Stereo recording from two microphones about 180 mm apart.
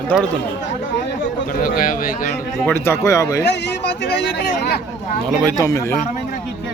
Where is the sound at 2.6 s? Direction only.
10° left (ahead or behind).